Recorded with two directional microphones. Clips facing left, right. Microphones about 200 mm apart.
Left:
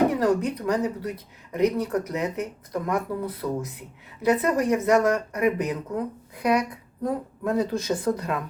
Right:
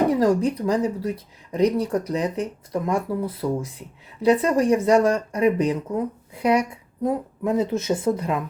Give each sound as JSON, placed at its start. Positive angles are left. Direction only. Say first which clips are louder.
{"t": 0.1, "sound": "speech", "louder": "right 3 dB", "side_deg": -30}